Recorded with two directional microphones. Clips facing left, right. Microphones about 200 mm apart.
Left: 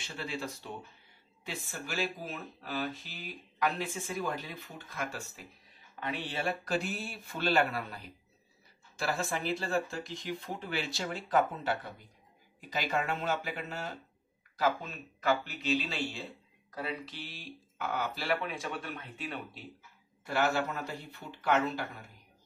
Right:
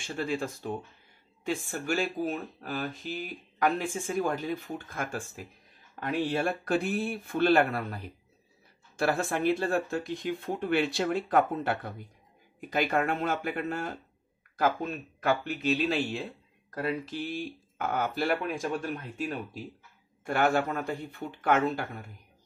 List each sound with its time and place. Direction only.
0.0 s speech: 50° right (ahead or behind)
20.2 s speech: 50° right (ahead or behind)